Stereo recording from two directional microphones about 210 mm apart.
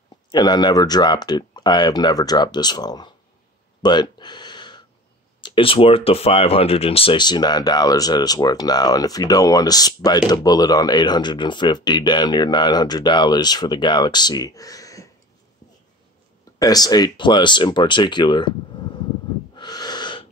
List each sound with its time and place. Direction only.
0.3 s speech: 20° left (ahead or behind)
16.5 s speech: 20° left (ahead or behind)
19.5 s snort: 20° left (ahead or behind)